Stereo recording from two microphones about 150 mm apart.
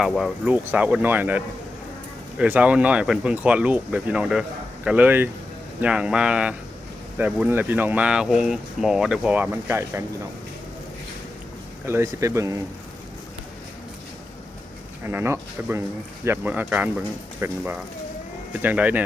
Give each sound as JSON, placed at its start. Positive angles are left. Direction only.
{"t": 0.0, "sound": "speech", "side_deg": 0}
{"t": 2.4, "sound": "speech", "side_deg": -10}
{"t": 11.9, "sound": "speech", "side_deg": -20}
{"t": 15.0, "sound": "speech", "side_deg": -15}